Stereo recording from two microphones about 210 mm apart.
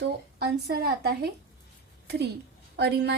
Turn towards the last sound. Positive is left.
turn(degrees=-55)  # may be behind; listen again after turning